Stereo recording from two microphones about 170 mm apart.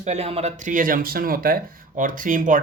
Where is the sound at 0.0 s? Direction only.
40° right (ahead or behind).